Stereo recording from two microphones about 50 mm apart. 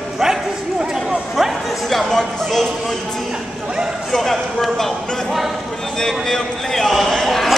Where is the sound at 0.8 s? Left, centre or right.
Centre.